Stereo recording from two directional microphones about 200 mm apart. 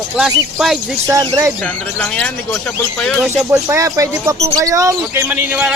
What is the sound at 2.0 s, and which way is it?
A man's voice, 5° left (ahead or behind).